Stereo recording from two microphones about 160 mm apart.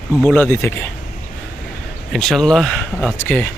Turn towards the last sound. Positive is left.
turn(degrees=10)  # may be behind; listen again after turning